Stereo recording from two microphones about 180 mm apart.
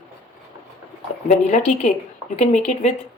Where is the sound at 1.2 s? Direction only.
40° left (ahead or behind).